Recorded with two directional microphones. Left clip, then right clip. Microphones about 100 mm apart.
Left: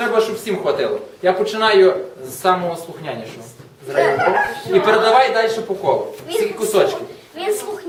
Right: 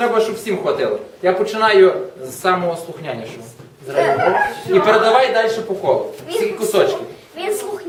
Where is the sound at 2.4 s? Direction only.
10° right (ahead or behind).